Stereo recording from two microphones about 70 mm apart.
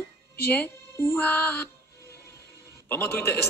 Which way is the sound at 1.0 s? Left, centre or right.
Left.